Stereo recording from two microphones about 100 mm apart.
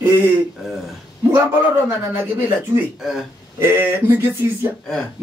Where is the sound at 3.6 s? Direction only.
25° right (ahead or behind).